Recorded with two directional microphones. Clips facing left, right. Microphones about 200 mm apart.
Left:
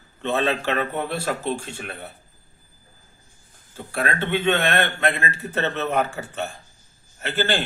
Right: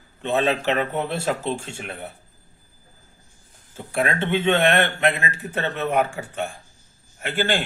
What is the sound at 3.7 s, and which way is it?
A man's voice, 25° right (ahead or behind).